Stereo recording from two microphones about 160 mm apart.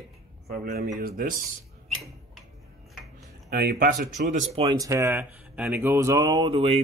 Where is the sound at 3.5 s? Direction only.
70° right (ahead or behind).